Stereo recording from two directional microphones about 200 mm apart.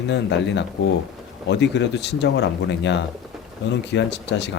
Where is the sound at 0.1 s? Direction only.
60° left (ahead or behind).